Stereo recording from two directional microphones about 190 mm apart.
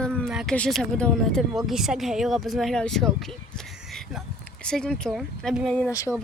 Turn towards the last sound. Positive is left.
turn(degrees=15)  # may be behind; listen again after turning